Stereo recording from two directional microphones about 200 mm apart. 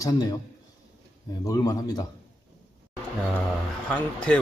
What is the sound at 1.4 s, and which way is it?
Speech, 20° left (ahead or behind).